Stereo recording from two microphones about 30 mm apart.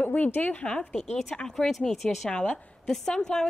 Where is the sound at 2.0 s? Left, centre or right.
Left.